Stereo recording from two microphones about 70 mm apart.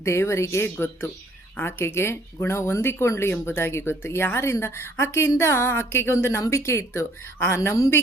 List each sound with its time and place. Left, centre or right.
0.0 s speech: left